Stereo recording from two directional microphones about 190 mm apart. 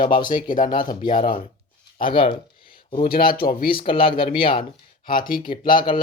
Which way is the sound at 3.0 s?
50° left (ahead or behind).